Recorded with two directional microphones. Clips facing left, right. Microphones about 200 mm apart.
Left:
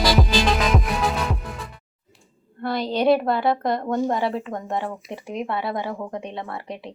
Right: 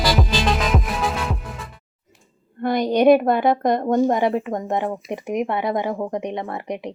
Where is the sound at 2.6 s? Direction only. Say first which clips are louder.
Right 5 dB; 20° right (ahead or behind).